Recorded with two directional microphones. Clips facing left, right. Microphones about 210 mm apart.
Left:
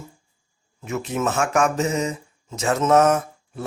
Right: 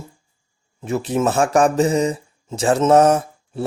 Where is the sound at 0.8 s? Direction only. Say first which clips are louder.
Right 5 dB; 30° right (ahead or behind).